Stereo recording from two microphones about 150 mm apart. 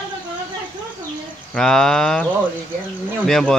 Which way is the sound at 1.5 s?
5° left (ahead or behind).